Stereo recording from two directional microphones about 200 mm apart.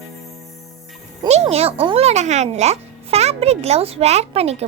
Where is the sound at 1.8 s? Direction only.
30° right (ahead or behind).